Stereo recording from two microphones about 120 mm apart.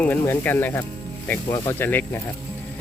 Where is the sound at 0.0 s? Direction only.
15° left (ahead or behind).